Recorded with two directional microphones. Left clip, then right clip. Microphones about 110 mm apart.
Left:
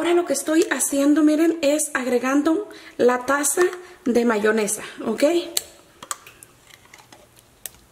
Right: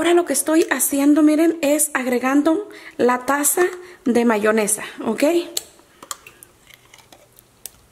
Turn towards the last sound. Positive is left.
turn(degrees=-10)  # may be behind; listen again after turning